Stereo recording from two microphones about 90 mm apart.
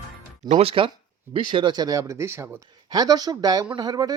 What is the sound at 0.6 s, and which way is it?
Speech, 90° right.